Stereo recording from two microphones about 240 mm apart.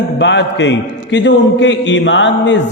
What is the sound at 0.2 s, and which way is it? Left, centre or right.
A man's voice, left.